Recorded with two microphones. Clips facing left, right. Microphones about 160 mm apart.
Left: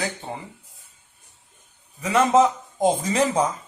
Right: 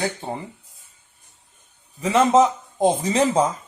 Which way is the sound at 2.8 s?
30° right (ahead or behind).